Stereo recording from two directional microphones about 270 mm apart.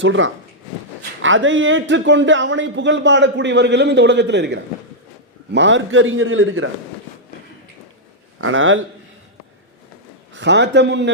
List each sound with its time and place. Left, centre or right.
0.0 s a man's voice: right
8.4 s a man's voice: right
10.3 s a man's voice: right